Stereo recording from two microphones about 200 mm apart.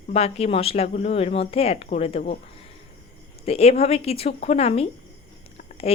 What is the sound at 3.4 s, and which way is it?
Speech, 30° left (ahead or behind).